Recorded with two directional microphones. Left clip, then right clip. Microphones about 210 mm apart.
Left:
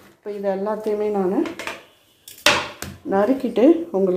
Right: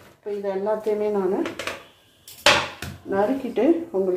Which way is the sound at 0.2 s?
45° left (ahead or behind).